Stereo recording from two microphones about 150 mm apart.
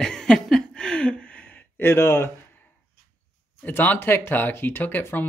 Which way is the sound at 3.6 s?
10° left (ahead or behind).